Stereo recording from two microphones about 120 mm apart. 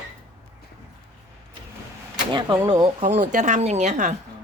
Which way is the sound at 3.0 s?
85° right.